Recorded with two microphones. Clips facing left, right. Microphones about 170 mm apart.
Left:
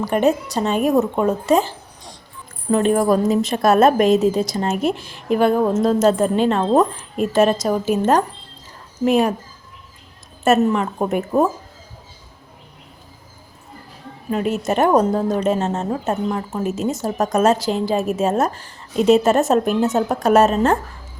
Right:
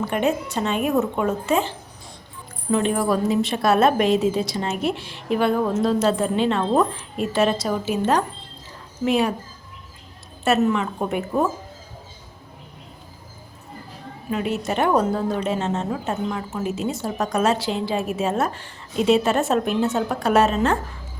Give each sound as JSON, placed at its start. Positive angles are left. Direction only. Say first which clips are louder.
{"t": 0.0, "sound": "speech", "louder": "left 4 dB", "side_deg": 40}
{"t": 2.7, "sound": "a woman's voice", "louder": "left 5 dB", "side_deg": 45}
{"t": 10.4, "sound": "a woman's voice", "louder": "left 3 dB", "side_deg": 45}
{"t": 14.3, "sound": "a woman's voice", "louder": "left 4 dB", "side_deg": 40}